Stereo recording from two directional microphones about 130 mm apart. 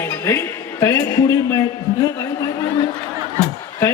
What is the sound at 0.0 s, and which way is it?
Music, 20° left (ahead or behind).